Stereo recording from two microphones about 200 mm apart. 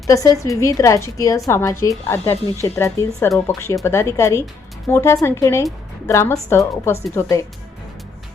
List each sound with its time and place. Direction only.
0.1 s a woman's voice: 15° left (ahead or behind)